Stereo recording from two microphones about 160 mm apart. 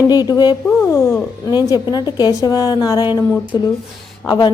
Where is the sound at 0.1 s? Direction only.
25° left (ahead or behind).